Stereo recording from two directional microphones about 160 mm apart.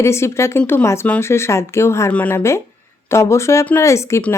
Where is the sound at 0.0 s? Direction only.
15° left (ahead or behind).